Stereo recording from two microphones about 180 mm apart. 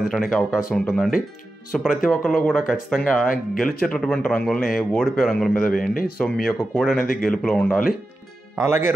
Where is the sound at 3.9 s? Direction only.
5° left (ahead or behind).